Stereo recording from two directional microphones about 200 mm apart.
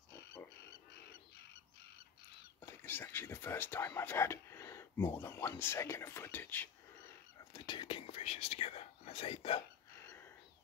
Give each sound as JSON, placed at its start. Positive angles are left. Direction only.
{"t": 0.1, "sound": "frog", "side_deg": 15}
{"t": 2.6, "sound": "speech", "side_deg": 10}
{"t": 7.3, "sound": "whispering", "side_deg": 20}
{"t": 10.0, "sound": "a sound", "side_deg": 10}